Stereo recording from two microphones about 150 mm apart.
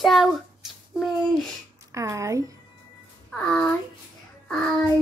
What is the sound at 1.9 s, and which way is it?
Speech, 20° right (ahead or behind).